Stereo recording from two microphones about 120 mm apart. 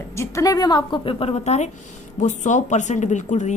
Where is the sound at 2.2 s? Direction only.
90° left.